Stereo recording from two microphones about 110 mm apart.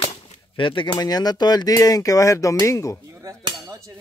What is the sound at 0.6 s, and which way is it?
Speech, 50° left (ahead or behind).